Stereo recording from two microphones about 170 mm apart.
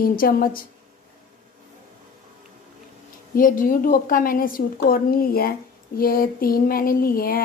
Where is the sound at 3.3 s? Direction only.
55° left (ahead or behind).